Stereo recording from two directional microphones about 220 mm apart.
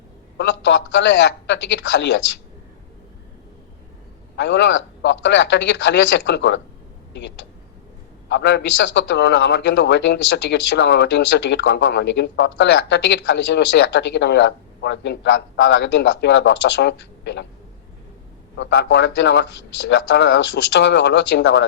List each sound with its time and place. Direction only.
0.3 s a man's voice: 55° left (ahead or behind)
4.4 s a man's voice: 55° left (ahead or behind)
8.3 s a man's voice: 50° left (ahead or behind)
18.5 s a man's voice: 55° left (ahead or behind)